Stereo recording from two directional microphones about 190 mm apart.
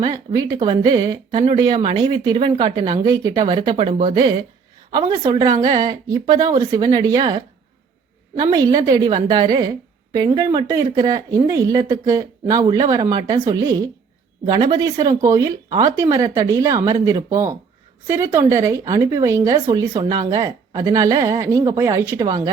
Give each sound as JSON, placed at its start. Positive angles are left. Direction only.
{"t": 0.0, "sound": "a woman's voice", "side_deg": -20}
{"t": 4.1, "sound": "a woman's voice", "side_deg": -25}